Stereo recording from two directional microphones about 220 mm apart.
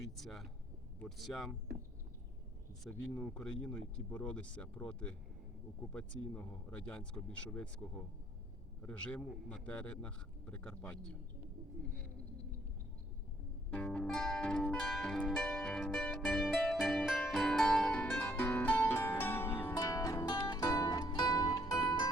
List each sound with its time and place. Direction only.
0.2 s speech: centre (ahead or behind)
2.8 s speech: 5° left (ahead or behind)
6.3 s speech: 5° left (ahead or behind)
8.8 s speech: 5° left (ahead or behind)
13.7 s music: 5° left (ahead or behind)